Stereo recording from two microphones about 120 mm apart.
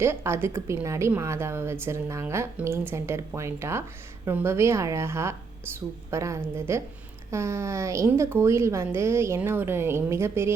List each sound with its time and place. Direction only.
0.0 s a woman's voice: 20° right (ahead or behind)